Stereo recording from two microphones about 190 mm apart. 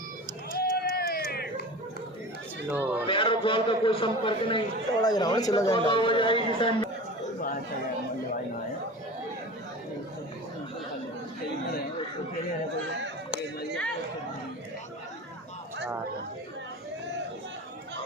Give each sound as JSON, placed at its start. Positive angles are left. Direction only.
{"t": 0.5, "sound": "run", "side_deg": 55}
{"t": 2.6, "sound": "speech", "side_deg": -10}
{"t": 3.1, "sound": "a man's voice", "side_deg": 25}